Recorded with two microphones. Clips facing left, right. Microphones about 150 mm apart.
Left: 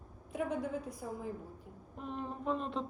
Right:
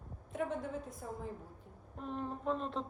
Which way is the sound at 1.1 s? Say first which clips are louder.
Left 2 dB; 5° left (ahead or behind).